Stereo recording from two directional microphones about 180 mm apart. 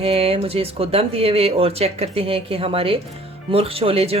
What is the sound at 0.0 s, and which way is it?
Speech, 30° right (ahead or behind).